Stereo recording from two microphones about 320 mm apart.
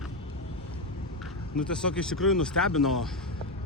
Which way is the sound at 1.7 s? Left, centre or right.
Centre.